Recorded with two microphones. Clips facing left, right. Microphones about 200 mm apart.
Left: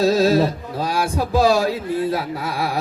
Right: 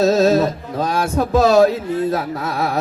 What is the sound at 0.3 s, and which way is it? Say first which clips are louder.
Mantra: right 1 dB; 30° left (ahead or behind).